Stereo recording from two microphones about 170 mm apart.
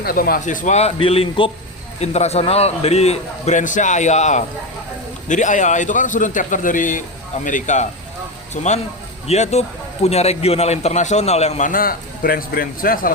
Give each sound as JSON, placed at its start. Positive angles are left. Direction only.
{"t": 0.0, "sound": "a man's voice", "side_deg": 60}